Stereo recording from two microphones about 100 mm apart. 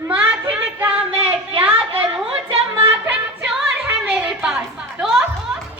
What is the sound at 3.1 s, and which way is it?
Music, 15° right (ahead or behind).